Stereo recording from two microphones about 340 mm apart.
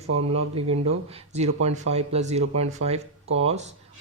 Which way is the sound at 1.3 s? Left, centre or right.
Centre.